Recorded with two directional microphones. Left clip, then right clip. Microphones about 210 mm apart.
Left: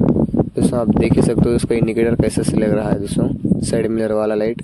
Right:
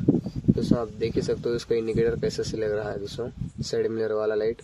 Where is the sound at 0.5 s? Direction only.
35° left (ahead or behind).